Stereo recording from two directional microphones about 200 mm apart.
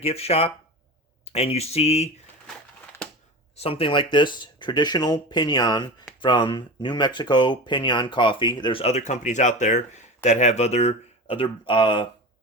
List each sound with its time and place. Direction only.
0.0 s speech: 30° left (ahead or behind)
3.6 s speech: 30° left (ahead or behind)